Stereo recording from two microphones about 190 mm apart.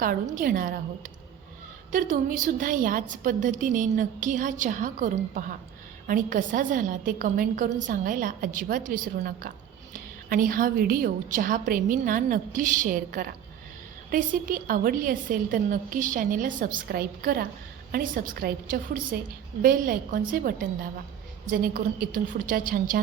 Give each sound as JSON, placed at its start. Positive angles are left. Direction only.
{"t": 0.0, "sound": "a woman's voice", "side_deg": -45}